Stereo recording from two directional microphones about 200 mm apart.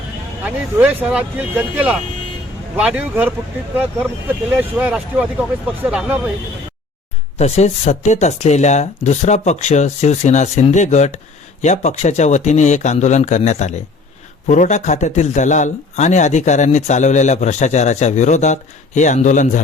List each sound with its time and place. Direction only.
0.4 s speech: 5° right (ahead or behind)
4.8 s speech: 5° right (ahead or behind)
7.3 s speech: 35° left (ahead or behind)